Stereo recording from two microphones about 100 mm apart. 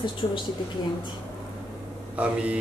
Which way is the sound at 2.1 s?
15° right (ahead or behind).